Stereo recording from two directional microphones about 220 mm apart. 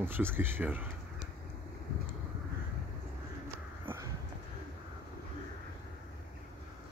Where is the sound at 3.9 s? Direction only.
10° right (ahead or behind).